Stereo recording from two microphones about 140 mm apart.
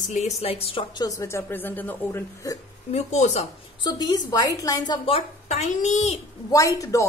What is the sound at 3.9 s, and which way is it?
A woman's voice, 30° left (ahead or behind).